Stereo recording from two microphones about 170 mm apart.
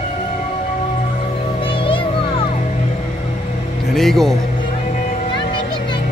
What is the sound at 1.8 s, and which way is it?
Music, 30° left (ahead or behind).